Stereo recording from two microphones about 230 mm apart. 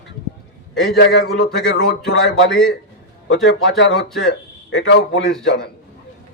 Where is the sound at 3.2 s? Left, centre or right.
Left.